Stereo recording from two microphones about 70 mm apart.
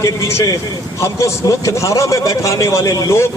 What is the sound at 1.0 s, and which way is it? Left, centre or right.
A man's voice, left.